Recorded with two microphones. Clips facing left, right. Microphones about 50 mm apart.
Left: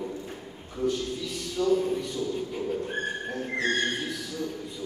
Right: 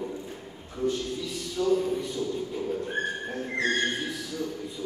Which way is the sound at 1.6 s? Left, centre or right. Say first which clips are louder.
Even; centre.